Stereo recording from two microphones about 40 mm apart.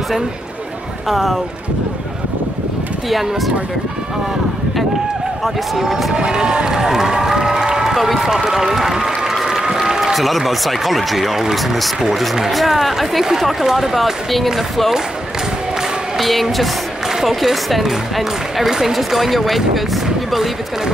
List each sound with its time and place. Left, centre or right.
1.0 s speech: centre
3.1 s speech: centre
5.4 s speech: centre
6.1 s speech: right
7.9 s applause: centre
10.1 s speech: centre
16.2 s speech: centre
17.1 s a sound: centre
17.4 s speech: centre